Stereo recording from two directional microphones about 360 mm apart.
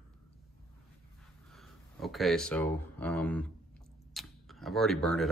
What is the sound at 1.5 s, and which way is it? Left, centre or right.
Speech, centre.